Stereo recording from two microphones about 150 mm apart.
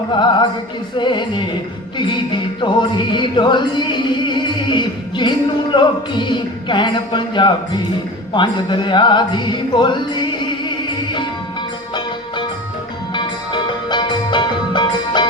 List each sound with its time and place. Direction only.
0.1 s music: 30° left (ahead or behind)
2.6 s music: 30° left (ahead or behind)
13.1 s music: 30° left (ahead or behind)